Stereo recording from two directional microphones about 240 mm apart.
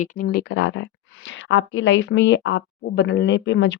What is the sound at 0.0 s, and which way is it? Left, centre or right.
Speech, left.